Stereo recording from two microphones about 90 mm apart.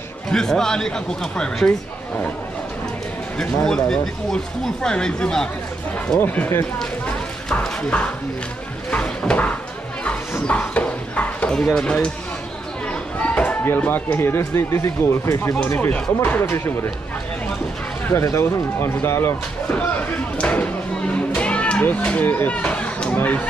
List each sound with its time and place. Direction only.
0.3 s speech: 5° left (ahead or behind)
3.3 s speech: 5° left (ahead or behind)
6.1 s speech: 20° left (ahead or behind)
7.6 s a sound: 10° left (ahead or behind)
10.4 s horse: 15° left (ahead or behind)
13.2 s speech: 15° left (ahead or behind); by 15.5 s 30° left (ahead or behind)
15.9 s speech: 20° left (ahead or behind)
18.2 s speech: 30° left (ahead or behind)
19.7 s speech: 15° left (ahead or behind)